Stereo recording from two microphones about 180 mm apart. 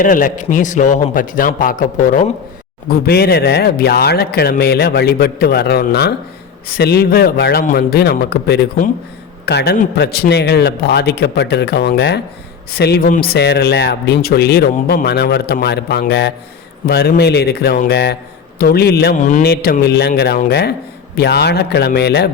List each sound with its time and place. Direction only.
0.0 s a man's voice: 45° left (ahead or behind)
2.9 s a man's voice: 60° left (ahead or behind)